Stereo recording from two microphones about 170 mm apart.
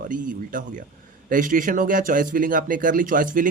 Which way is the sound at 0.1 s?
50° right (ahead or behind).